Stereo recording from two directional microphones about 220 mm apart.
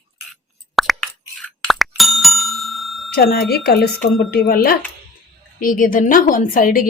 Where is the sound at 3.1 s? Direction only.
45° left (ahead or behind).